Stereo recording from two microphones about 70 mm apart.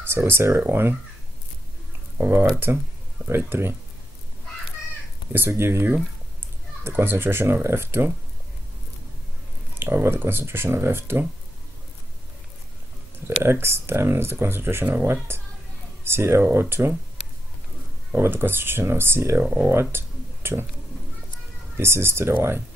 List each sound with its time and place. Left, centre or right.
0.0 s speech: right
2.1 s speech: right
5.3 s speech: right
9.8 s speech: right
13.4 s speech: right
18.1 s speech: right
19.7 s a sound: right
21.7 s speech: right